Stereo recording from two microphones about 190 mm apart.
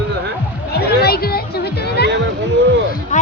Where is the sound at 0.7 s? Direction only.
55° left (ahead or behind).